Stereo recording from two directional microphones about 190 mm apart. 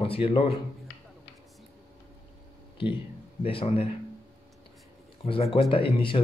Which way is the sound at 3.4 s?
30° left (ahead or behind).